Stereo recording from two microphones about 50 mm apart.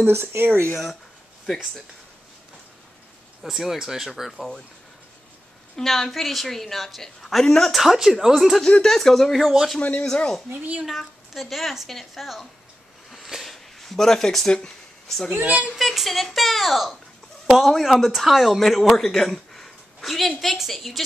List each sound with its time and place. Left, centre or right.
0.0 s speech: right
3.4 s a woman's voice: centre
5.8 s a woman's voice: centre
9.5 s a man's voice: centre
9.8 s speech: left
10.1 s speech: centre
11.0 s a woman's voice: centre
13.1 s a sound: centre
15.0 s a woman's voice: centre
15.3 s speech: right
15.7 s a woman's voice: centre